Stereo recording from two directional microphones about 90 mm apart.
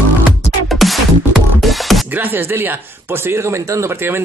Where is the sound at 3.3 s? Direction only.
30° right (ahead or behind).